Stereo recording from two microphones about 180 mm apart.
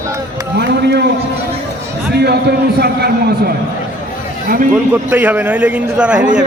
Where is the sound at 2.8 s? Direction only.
60° right (ahead or behind).